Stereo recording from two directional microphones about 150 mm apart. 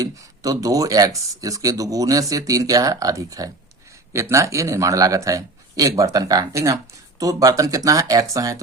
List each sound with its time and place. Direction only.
0.0 s speech: 25° right (ahead or behind)